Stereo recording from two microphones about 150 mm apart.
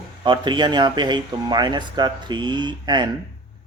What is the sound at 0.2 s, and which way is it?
Speech, 30° right (ahead or behind).